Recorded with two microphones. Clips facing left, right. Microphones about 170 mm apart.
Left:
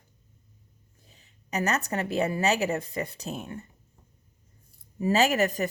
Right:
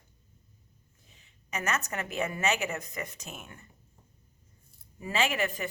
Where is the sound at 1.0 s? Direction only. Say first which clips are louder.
Left 5 dB; 35° left (ahead or behind).